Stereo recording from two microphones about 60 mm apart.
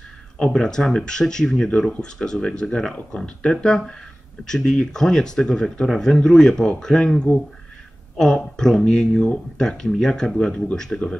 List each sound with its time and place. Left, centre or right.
0.6 s speech: centre